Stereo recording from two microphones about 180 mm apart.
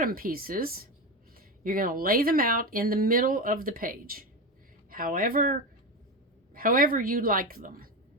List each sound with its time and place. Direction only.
0.0 s speech: 55° right (ahead or behind)